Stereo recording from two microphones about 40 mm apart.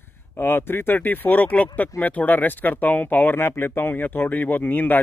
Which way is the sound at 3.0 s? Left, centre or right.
Left.